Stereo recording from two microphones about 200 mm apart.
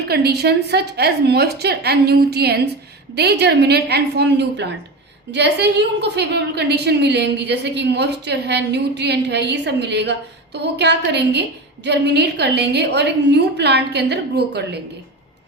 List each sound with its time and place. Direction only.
0.1 s a woman's voice: 55° right (ahead or behind)